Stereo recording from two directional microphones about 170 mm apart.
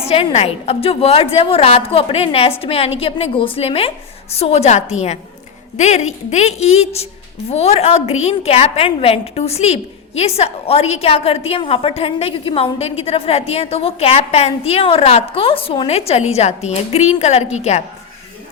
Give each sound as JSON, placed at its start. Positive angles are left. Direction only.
{"t": 0.1, "sound": "a woman's voice", "side_deg": 35}